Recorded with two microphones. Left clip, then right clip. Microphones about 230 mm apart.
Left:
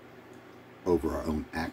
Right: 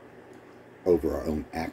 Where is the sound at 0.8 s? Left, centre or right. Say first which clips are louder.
Right 4 dB; centre.